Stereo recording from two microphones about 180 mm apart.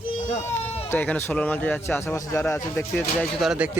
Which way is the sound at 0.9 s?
10° left (ahead or behind).